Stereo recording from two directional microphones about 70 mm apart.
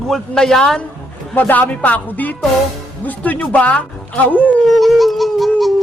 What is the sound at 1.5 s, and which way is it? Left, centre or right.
Speech, left.